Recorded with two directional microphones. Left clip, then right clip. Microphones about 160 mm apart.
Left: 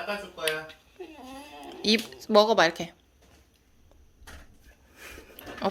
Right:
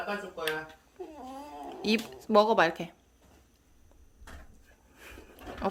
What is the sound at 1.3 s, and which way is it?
Speech, centre (ahead or behind).